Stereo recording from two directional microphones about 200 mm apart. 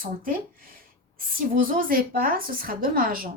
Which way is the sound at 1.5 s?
45° right (ahead or behind).